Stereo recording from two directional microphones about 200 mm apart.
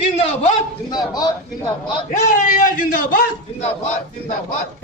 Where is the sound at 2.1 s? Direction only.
40° left (ahead or behind).